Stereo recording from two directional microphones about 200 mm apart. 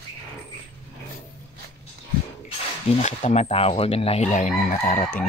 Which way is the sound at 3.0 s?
35° left (ahead or behind).